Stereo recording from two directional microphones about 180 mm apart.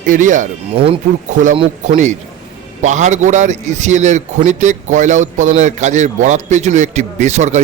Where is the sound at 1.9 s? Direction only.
45° right (ahead or behind).